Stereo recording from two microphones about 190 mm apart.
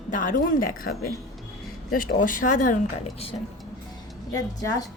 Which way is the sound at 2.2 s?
45° left (ahead or behind).